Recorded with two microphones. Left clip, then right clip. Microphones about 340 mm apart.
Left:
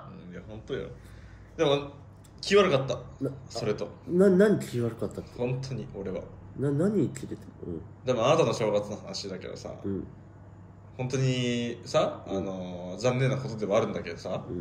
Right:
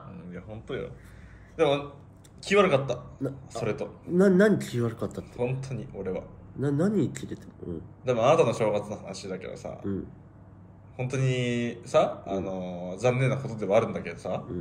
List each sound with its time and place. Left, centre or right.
0.1 s a sound: centre
2.4 s speech: centre
11.0 s speech: centre